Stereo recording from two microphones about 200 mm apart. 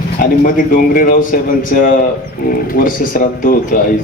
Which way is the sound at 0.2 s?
45° left (ahead or behind).